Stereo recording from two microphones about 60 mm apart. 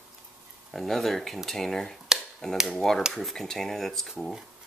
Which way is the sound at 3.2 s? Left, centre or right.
Centre.